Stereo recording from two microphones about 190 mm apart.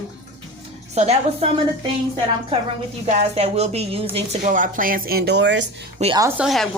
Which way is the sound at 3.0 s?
35° right (ahead or behind).